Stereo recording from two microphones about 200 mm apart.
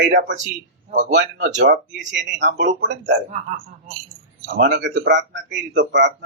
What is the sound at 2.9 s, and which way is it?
Speech, 40° right (ahead or behind).